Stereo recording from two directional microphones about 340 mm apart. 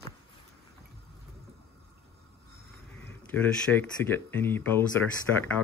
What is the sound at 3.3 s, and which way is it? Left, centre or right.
Speech, centre.